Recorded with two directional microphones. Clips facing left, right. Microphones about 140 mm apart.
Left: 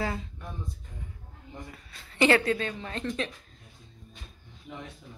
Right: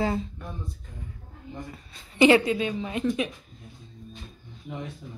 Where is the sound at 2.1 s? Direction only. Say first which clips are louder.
Right 5 dB; 15° right (ahead or behind).